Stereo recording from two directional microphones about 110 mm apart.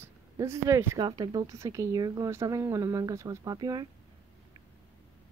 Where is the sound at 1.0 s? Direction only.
40° right (ahead or behind).